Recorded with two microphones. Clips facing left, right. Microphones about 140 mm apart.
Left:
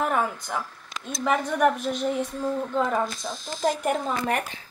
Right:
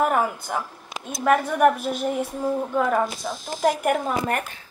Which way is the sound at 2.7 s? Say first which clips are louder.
Right 3 dB; 55° right (ahead or behind).